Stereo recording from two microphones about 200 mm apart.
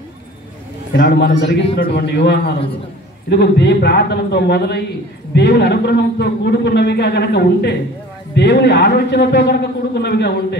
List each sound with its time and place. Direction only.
1.0 s a man's voice: 55° left (ahead or behind)